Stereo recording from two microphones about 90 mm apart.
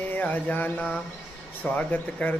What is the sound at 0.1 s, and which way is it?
Speech, 15° left (ahead or behind).